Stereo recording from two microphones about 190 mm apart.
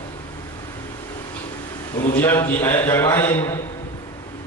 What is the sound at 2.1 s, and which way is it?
Speech, 10° left (ahead or behind).